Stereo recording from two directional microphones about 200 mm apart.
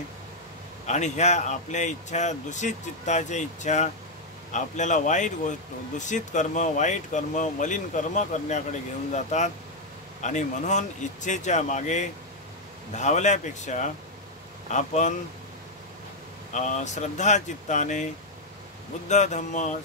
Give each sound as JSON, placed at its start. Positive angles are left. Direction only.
{"t": 0.8, "sound": "speech", "side_deg": 35}
{"t": 16.5, "sound": "speech", "side_deg": 35}
{"t": 19.0, "sound": "speech", "side_deg": 35}